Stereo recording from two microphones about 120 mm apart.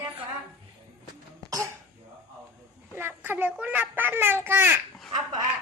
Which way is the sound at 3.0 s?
20° right (ahead or behind).